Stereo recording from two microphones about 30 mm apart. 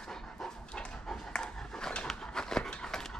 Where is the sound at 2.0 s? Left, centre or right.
Left.